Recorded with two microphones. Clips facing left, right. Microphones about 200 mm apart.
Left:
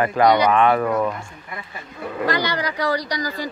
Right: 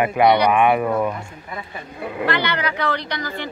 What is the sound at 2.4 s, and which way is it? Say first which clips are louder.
Speech: even; 35° left (ahead or behind).